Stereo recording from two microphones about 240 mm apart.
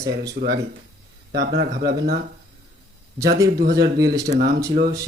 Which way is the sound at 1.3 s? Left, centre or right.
Right.